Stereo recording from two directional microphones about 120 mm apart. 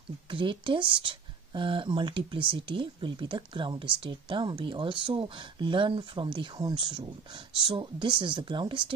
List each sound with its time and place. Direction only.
0.3 s speech: 45° right (ahead or behind)